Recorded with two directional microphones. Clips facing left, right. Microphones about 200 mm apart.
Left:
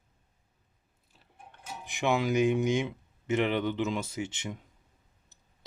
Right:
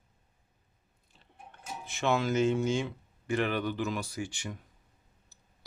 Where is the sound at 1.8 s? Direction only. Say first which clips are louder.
Left 1 dB; 15° left (ahead or behind).